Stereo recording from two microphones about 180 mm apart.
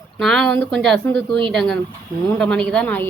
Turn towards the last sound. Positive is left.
turn(degrees=5)  # may be behind; listen again after turning